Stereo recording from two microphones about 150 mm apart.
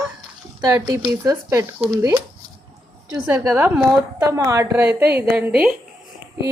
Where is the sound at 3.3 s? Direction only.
10° right (ahead or behind).